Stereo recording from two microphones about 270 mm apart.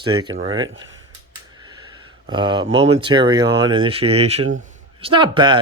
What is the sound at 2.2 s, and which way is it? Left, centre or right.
Speech, centre.